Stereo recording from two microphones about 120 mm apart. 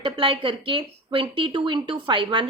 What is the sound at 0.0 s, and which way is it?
Speech, 45° right (ahead or behind).